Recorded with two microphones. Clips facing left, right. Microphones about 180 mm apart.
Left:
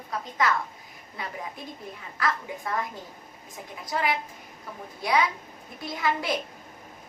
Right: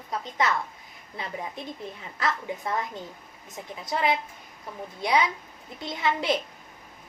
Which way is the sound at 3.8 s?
25° right (ahead or behind).